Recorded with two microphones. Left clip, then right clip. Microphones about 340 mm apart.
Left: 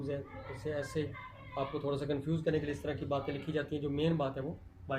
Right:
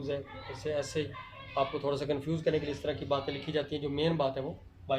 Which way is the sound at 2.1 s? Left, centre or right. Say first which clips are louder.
Right 3 dB; right.